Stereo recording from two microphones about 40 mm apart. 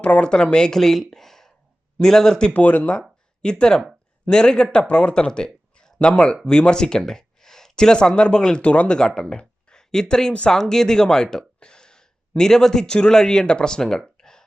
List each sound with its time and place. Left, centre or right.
0.0 s speech: left
0.8 s speech: centre
2.5 s speech: left
3.4 s speech: centre
8.6 s speech: left
9.0 s speech: centre
14.2 s a sound: centre